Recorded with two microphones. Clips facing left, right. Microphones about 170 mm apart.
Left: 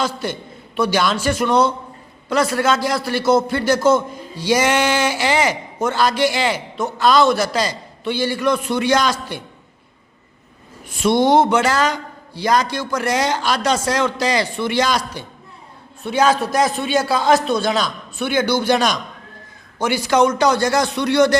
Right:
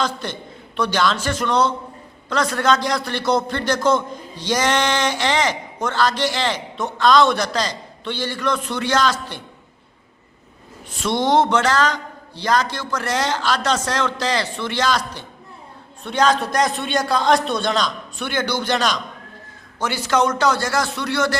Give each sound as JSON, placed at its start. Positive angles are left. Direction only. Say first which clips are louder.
{"t": 0.0, "sound": "a man's voice", "louder": "left 2 dB", "side_deg": 10}
{"t": 10.8, "sound": "a man's voice", "louder": "left 5 dB", "side_deg": 10}